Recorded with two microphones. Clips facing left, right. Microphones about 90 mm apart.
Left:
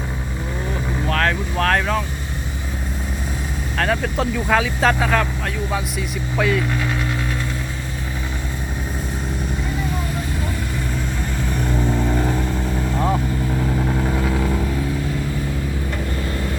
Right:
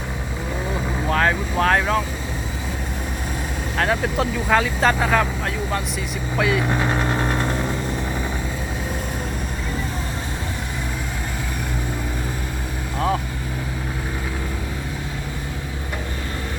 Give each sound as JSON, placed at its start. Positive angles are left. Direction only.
{"t": 0.7, "sound": "vehicle", "side_deg": -10}
{"t": 3.8, "sound": "speech", "side_deg": -5}
{"t": 6.3, "sound": "speech", "side_deg": -5}
{"t": 6.7, "sound": "vehicle", "side_deg": -35}